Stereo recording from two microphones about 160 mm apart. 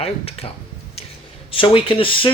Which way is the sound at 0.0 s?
40° left (ahead or behind).